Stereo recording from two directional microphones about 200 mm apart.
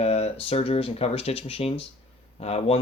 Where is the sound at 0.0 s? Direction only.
30° left (ahead or behind).